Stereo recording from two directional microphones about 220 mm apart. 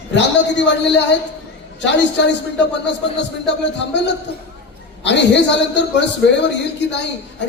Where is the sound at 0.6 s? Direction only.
55° left (ahead or behind).